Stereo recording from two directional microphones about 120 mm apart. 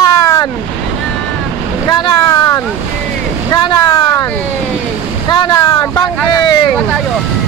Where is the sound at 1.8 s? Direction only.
30° left (ahead or behind).